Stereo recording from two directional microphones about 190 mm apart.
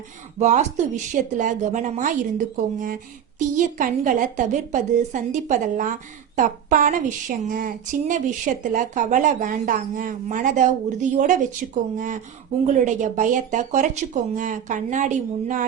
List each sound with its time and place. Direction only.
0.3 s a woman's voice: 40° right (ahead or behind)